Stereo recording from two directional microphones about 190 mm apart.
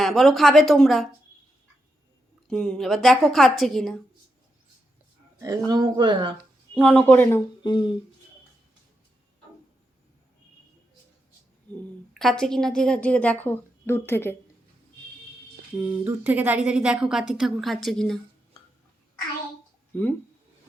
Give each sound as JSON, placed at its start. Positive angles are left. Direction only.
{"t": 0.0, "sound": "a woman's voice", "side_deg": 0}
{"t": 2.5, "sound": "a woman's voice", "side_deg": 5}
{"t": 5.4, "sound": "speech", "side_deg": -20}
{"t": 6.7, "sound": "a woman's voice", "side_deg": 5}
{"t": 7.6, "sound": "speech", "side_deg": 25}
{"t": 12.2, "sound": "a woman's voice", "side_deg": 0}
{"t": 15.8, "sound": "a woman's voice", "side_deg": -10}
{"t": 19.9, "sound": "speech", "side_deg": 10}